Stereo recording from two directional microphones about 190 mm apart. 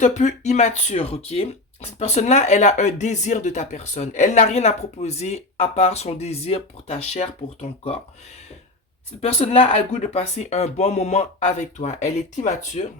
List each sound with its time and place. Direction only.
0.0 s speech: 40° left (ahead or behind)
9.2 s speech: 30° left (ahead or behind)